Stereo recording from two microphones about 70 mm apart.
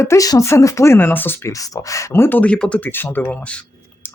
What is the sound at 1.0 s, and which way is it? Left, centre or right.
Speech, left.